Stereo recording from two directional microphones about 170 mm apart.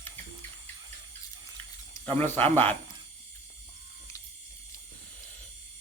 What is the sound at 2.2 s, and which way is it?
Speech, 10° left (ahead or behind).